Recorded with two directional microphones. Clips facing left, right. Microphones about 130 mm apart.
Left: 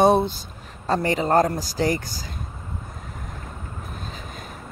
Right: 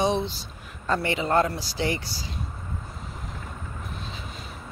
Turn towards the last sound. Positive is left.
turn(degrees=45)  # may be behind; listen again after turning